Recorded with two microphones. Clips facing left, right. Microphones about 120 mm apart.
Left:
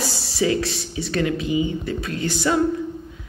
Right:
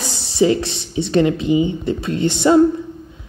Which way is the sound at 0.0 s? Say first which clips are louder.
Right 6 dB; 20° right (ahead or behind).